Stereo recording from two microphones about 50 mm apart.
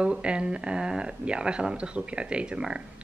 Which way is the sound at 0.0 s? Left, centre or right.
Right.